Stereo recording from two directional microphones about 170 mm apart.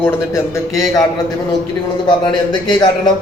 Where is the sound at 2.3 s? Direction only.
25° left (ahead or behind).